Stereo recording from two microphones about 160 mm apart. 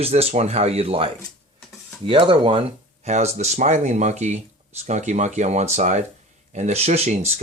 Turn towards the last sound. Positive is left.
turn(degrees=-45)  # may be behind; listen again after turning